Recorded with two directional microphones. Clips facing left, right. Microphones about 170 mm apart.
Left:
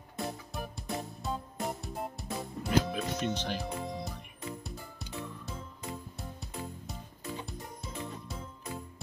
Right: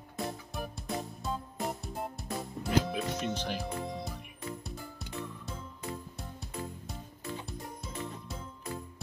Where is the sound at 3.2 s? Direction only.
5° right (ahead or behind).